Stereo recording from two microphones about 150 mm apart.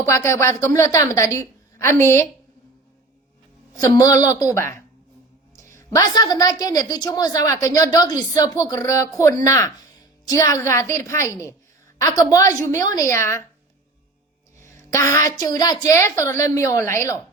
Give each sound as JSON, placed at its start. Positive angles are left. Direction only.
{"t": 0.1, "sound": "a woman's voice", "side_deg": 20}
{"t": 3.8, "sound": "a woman's voice", "side_deg": 25}
{"t": 14.6, "sound": "a woman's voice", "side_deg": 20}